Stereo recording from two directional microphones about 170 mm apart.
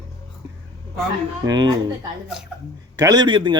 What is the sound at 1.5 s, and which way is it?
Speech, 25° right (ahead or behind).